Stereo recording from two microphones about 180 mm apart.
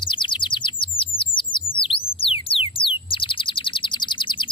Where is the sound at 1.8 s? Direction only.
30° left (ahead or behind).